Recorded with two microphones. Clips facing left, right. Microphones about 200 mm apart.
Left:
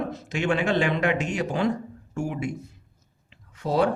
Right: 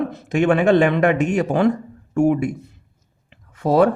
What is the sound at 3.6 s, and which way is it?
Speech, 55° right (ahead or behind).